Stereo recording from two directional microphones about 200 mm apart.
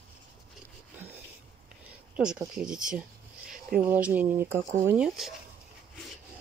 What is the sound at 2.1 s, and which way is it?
Speech, 5° right (ahead or behind).